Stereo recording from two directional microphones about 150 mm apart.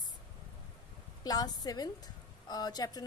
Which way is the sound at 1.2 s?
25° left (ahead or behind).